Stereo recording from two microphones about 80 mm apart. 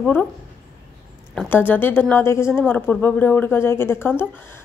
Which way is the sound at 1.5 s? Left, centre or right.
Left.